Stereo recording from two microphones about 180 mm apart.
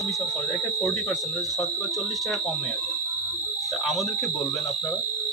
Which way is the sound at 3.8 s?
Centre (ahead or behind).